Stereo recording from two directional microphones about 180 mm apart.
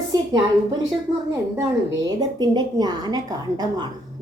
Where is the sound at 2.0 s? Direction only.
20° right (ahead or behind).